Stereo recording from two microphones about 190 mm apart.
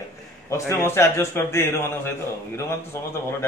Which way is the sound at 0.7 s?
15° left (ahead or behind).